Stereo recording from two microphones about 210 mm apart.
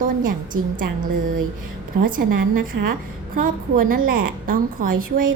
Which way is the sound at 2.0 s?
40° right (ahead or behind).